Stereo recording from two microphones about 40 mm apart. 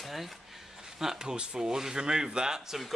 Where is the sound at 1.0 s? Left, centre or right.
Centre.